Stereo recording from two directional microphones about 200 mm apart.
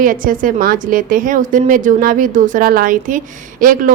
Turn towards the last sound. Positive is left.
turn(degrees=-45)  # may be behind; listen again after turning